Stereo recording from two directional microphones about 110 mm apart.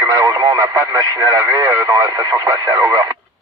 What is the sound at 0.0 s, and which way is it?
Speech, 35° right (ahead or behind).